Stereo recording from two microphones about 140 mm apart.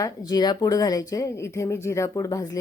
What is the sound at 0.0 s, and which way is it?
A woman's voice, 25° left (ahead or behind).